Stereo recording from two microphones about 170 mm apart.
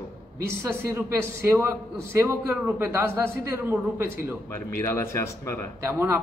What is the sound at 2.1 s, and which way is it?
A man's voice, 10° right (ahead or behind).